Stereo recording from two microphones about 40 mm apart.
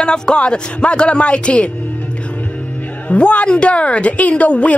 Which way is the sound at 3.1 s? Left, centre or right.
Left.